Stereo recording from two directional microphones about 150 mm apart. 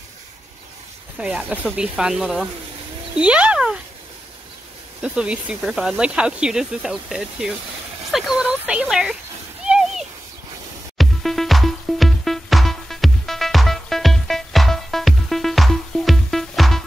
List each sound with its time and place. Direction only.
1.2 s speech: 10° right (ahead or behind)
5.0 s speech: 5° right (ahead or behind)
9.7 s a sound: centre (ahead or behind)
11.0 s music: centre (ahead or behind)